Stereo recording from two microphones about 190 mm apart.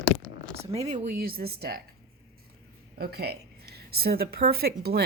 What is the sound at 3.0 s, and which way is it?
Speech, 55° right (ahead or behind).